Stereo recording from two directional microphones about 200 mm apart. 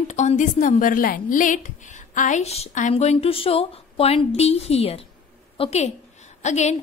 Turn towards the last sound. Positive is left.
turn(degrees=35)  # may be behind; listen again after turning